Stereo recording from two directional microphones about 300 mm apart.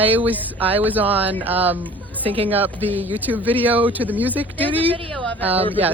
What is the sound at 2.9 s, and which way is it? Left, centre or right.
Speech, centre.